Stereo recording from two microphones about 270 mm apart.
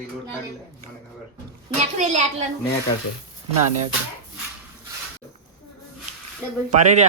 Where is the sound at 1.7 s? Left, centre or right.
Right.